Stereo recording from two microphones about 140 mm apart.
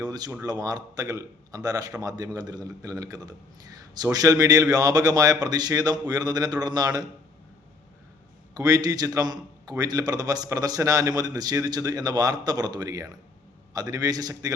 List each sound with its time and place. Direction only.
0.0 s a sound: 30° right (ahead or behind)
0.4 s a man's voice: 25° right (ahead or behind)
8.5 s a man's voice: 25° right (ahead or behind)